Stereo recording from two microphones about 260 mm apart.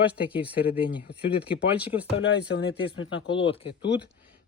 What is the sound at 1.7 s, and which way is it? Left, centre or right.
Speech, centre.